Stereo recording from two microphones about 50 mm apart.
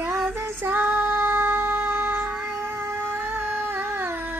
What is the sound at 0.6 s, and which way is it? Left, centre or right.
Music, right.